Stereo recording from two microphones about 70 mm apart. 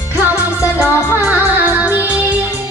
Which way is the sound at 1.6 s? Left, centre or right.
Right.